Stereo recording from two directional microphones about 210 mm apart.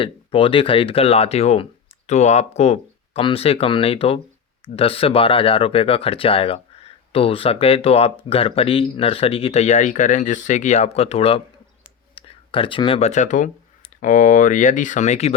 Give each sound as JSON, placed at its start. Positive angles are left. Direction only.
{"t": 0.0, "sound": "speech", "side_deg": 25}